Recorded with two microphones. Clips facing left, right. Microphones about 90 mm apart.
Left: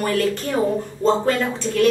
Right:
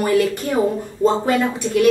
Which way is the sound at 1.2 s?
15° right (ahead or behind).